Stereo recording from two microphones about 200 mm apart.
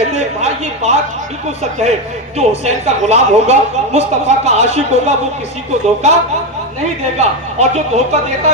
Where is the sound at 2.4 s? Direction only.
35° right (ahead or behind).